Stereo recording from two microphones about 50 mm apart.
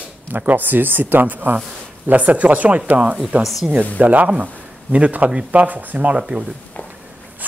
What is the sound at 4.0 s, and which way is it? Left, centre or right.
Speech, right.